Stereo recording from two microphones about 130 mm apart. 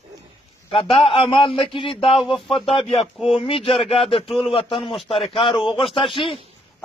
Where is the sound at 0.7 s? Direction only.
45° left (ahead or behind).